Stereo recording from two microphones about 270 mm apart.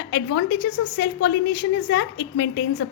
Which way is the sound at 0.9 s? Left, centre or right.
Left.